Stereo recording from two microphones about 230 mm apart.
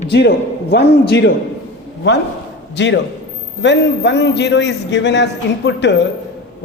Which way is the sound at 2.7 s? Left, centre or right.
Left.